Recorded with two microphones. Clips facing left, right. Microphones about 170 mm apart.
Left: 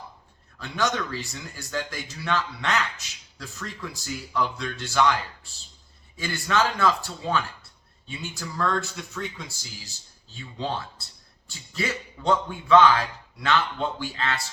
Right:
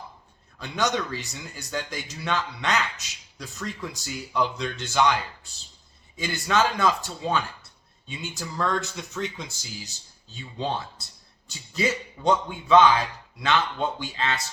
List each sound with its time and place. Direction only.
0.6 s speech: 20° right (ahead or behind)